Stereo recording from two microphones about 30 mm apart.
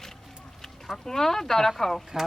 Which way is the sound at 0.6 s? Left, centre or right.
Centre.